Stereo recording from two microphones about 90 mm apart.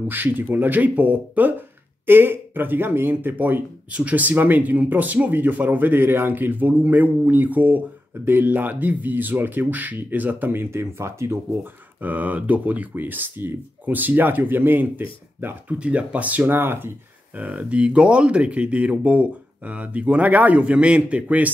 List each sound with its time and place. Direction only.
0.1 s speech: 20° right (ahead or behind)
12.0 s speech: 20° right (ahead or behind)